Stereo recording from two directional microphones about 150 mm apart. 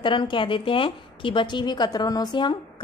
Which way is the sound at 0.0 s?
30° left (ahead or behind).